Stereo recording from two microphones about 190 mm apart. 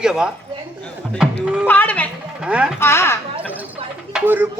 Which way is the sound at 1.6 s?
10° left (ahead or behind).